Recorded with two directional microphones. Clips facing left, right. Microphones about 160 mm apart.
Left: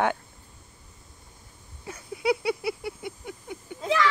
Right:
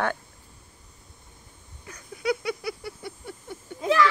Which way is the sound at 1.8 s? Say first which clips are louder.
Left 2 dB; 25° left (ahead or behind).